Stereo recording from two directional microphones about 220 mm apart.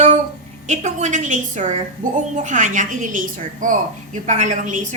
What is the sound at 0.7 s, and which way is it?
A woman's voice, 30° right (ahead or behind).